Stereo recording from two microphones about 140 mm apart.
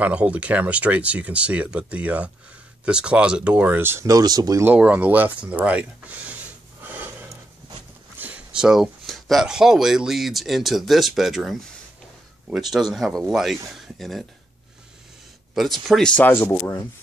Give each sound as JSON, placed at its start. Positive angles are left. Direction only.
{"t": 0.0, "sound": "speech", "side_deg": -10}
{"t": 4.6, "sound": "speech", "side_deg": -10}
{"t": 6.8, "sound": "a sound", "side_deg": -15}
{"t": 8.2, "sound": "speech", "side_deg": -10}
{"t": 15.5, "sound": "speech", "side_deg": 0}
{"t": 16.4, "sound": "speech", "side_deg": 20}